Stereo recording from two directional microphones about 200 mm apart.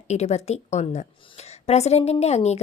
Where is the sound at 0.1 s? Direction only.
35° left (ahead or behind).